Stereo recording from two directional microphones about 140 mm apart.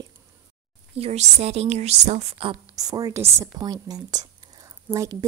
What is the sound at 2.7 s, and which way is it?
A woman's voice, 25° right (ahead or behind).